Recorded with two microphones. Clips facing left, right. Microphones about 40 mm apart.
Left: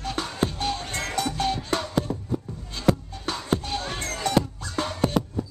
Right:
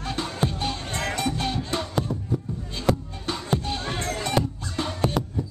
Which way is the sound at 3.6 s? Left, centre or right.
Centre.